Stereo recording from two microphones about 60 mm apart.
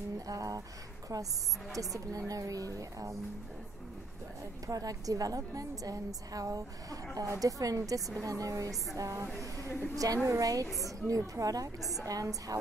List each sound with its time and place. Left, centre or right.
0.3 s a woman's voice: right
1.1 s a woman's voice: right
2.0 s a woman's voice: right
4.6 s a woman's voice: right
7.2 s a woman's voice: right